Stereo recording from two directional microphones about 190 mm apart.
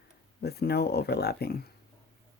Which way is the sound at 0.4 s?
60° left (ahead or behind).